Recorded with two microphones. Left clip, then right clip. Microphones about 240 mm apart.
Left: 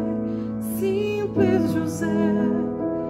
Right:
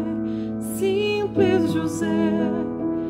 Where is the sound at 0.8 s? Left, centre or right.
Centre.